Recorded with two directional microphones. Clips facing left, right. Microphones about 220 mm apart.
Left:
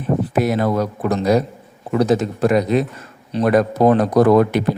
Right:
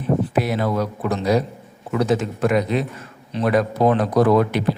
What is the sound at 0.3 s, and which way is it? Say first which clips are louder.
A man's voice: left 3 dB; 45° left (ahead or behind).